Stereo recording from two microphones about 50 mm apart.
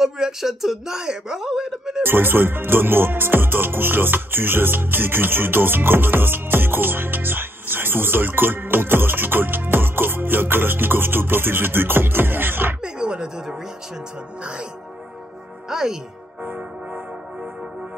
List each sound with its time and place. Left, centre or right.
0.0 s a man's voice: centre
2.0 s music: right
12.8 s a sound: centre
14.4 s music: centre
15.7 s music: centre
16.4 s music: right